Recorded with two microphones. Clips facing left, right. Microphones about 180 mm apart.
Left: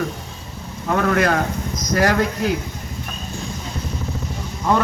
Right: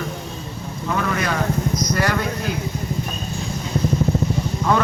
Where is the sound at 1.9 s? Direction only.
45° left (ahead or behind).